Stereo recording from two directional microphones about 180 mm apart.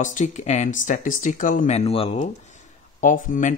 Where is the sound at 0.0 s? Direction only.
45° left (ahead or behind).